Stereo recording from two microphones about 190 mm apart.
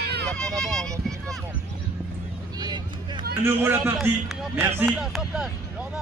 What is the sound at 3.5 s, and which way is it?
A man's voice, 10° right (ahead or behind).